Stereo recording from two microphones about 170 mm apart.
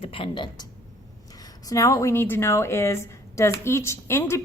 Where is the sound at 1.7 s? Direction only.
20° left (ahead or behind).